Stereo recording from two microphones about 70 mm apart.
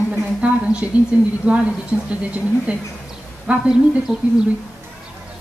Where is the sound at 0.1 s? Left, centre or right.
Centre.